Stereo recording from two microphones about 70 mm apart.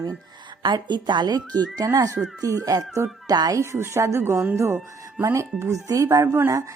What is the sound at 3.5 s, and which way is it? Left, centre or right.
A woman's voice, right.